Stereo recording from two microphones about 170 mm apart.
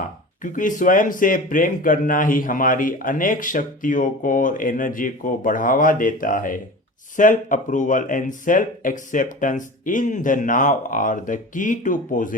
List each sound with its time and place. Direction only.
0.4 s speech: 50° left (ahead or behind)